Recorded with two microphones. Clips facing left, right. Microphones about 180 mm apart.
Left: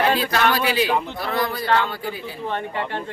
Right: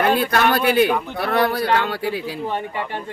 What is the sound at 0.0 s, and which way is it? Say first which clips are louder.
A man's voice: right 2 dB; 55° right (ahead or behind).